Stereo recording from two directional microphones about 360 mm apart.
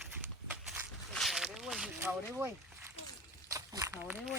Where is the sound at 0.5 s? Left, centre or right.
Centre.